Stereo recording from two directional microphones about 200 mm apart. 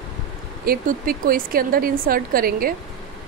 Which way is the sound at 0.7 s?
45° right (ahead or behind).